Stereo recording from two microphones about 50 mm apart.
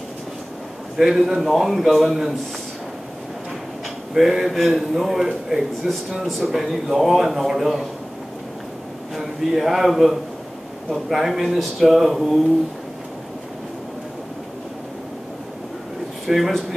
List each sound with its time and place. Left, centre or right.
0.9 s a man's voice: centre
4.1 s a man's voice: centre
9.1 s a man's voice: centre
16.3 s a man's voice: centre